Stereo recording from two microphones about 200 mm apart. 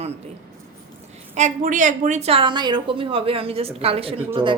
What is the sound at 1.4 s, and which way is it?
A woman's voice, 40° right (ahead or behind).